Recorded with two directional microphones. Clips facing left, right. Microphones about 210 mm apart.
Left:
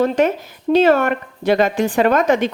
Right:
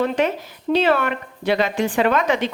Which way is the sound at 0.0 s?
45° left (ahead or behind).